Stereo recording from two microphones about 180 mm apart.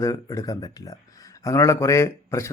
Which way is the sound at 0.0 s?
20° left (ahead or behind).